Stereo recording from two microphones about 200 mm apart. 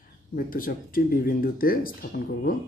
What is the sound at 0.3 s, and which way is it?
Speech, 45° left (ahead or behind).